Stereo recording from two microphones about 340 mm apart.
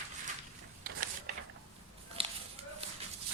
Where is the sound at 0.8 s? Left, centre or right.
Right.